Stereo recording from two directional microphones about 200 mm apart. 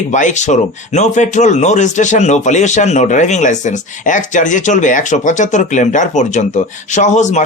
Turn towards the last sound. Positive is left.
turn(degrees=35)  # may be behind; listen again after turning